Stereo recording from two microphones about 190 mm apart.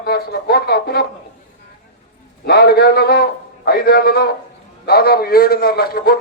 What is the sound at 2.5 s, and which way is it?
A man's voice, 55° left (ahead or behind).